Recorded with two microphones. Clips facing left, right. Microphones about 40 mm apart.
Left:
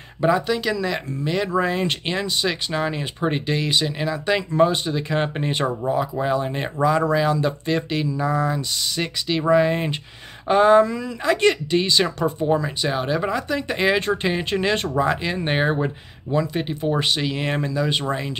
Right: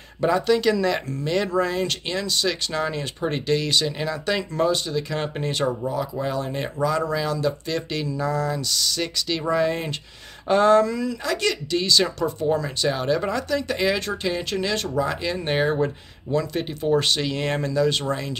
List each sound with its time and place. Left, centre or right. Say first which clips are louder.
0.2 s speech: even; centre
1.5 s speech: left 1 dB; centre
12.4 s speech: right 1 dB; centre